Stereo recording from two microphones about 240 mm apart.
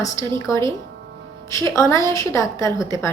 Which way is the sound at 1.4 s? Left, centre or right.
Centre.